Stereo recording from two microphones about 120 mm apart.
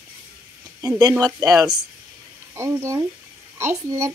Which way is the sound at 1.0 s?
30° right (ahead or behind).